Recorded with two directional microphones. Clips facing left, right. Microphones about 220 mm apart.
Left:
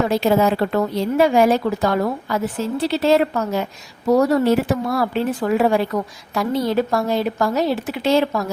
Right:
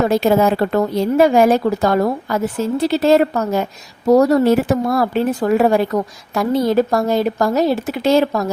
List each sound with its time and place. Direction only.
0.1 s speech: 45° right (ahead or behind)